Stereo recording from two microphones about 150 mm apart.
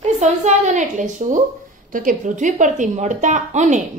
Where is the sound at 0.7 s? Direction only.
55° right (ahead or behind).